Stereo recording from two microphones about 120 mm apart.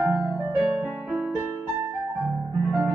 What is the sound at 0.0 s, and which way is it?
Music, 10° right (ahead or behind).